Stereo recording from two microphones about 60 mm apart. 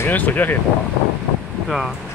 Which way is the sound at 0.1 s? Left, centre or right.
Left.